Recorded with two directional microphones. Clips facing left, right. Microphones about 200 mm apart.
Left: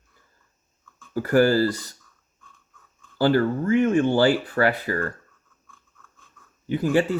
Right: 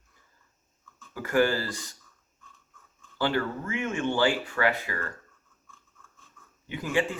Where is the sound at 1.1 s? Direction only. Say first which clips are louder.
Left 6 dB; 35° left (ahead or behind).